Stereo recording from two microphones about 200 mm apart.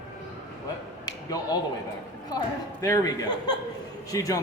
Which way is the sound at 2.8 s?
15° left (ahead or behind).